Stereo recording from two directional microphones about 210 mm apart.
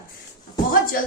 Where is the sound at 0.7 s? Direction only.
45° left (ahead or behind).